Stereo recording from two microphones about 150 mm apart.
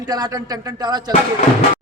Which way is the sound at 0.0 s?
25° right (ahead or behind).